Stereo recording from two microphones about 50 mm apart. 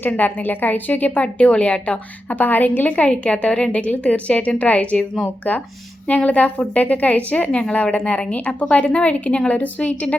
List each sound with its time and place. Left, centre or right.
0.2 s a woman's voice: left
2.3 s a woman's voice: left